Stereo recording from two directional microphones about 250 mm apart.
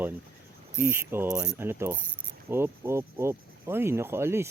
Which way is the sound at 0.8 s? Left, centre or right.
Centre.